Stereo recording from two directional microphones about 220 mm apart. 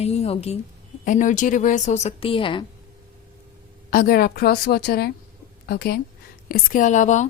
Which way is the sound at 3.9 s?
40° left (ahead or behind).